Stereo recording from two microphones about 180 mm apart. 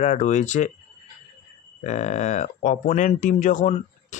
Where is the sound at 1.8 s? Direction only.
40° left (ahead or behind).